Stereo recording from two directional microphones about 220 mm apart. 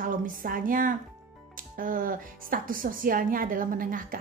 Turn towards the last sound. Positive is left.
turn(degrees=-40)  # may be behind; listen again after turning